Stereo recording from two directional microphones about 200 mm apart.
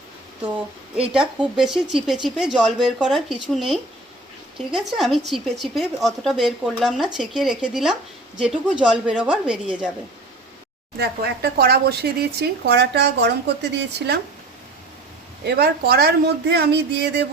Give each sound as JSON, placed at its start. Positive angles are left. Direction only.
{"t": 1.1, "sound": "speech", "side_deg": -5}
{"t": 10.9, "sound": "speech", "side_deg": -55}
{"t": 15.4, "sound": "speech", "side_deg": -55}